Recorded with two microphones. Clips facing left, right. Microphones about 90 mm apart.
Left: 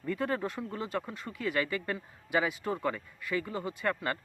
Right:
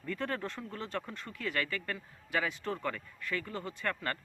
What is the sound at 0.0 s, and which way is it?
Speech, 10° left (ahead or behind).